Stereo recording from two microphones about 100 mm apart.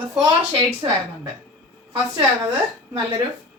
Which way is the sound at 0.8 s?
45° right (ahead or behind).